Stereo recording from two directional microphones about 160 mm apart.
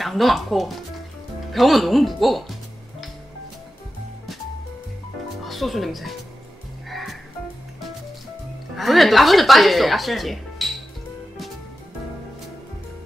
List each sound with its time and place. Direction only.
0.0 s speech: centre (ahead or behind)
5.4 s speech: centre (ahead or behind)
6.9 s music: centre (ahead or behind)
8.7 s speech: centre (ahead or behind)